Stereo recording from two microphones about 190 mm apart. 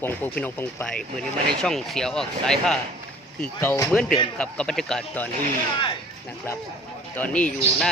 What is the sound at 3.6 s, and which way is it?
Speech, 15° left (ahead or behind).